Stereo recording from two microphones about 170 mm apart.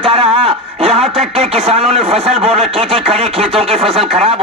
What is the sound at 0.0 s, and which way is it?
Speech, 35° right (ahead or behind).